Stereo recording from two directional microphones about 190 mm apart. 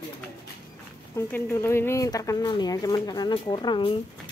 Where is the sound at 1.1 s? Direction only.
10° left (ahead or behind).